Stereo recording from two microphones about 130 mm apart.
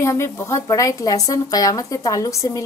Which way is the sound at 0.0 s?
20° left (ahead or behind).